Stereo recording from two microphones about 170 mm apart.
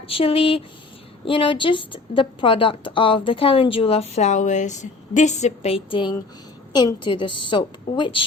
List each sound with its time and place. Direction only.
0.1 s a woman's voice: 35° left (ahead or behind)